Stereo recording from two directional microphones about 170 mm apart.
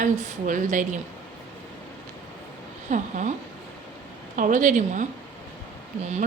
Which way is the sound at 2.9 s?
45° right (ahead or behind).